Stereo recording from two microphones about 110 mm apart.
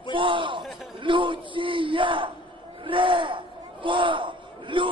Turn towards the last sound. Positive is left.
turn(degrees=-50)  # may be behind; listen again after turning